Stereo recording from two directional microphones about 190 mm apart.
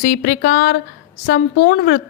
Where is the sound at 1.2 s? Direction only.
65° left (ahead or behind).